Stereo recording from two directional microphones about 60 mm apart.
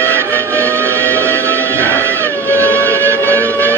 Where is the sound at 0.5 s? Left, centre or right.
Right.